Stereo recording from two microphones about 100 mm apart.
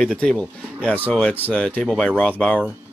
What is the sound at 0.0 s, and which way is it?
Speech, 10° left (ahead or behind).